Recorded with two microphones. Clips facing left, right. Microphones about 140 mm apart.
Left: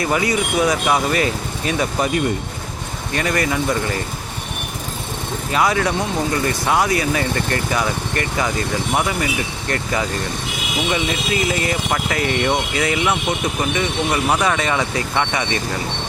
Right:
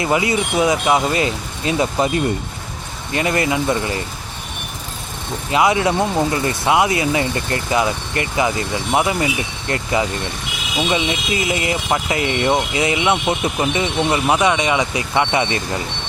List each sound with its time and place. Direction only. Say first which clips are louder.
0.0 s speech: right 1 dB; 20° right (ahead or behind)
3.2 s speech: right 2 dB; 25° right (ahead or behind)
5.5 s speech: right 3 dB; 20° right (ahead or behind)